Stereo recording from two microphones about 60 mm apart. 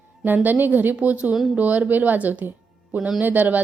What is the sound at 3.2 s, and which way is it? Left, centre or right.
Speech, right.